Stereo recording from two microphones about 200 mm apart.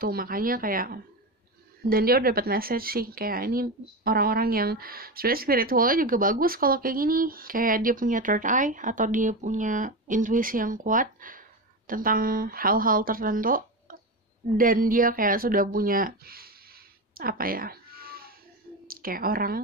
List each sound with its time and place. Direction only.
0.0 s a woman's voice: 45° right (ahead or behind)
14.6 s a woman's voice: 45° right (ahead or behind)
17.1 s cat: 45° right (ahead or behind)
18.9 s a woman's voice: 45° right (ahead or behind)